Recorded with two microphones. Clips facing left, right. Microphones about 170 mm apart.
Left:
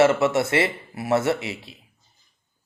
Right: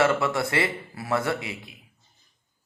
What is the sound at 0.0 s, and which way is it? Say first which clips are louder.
A man's voice: left 5 dB; 25° left (ahead or behind).